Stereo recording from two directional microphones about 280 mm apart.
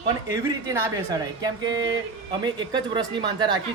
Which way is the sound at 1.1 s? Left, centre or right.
Centre.